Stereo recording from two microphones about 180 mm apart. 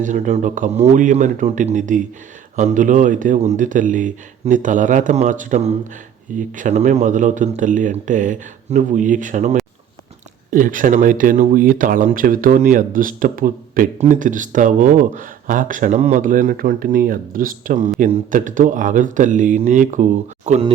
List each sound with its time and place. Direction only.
0.0 s speech: 40° right (ahead or behind)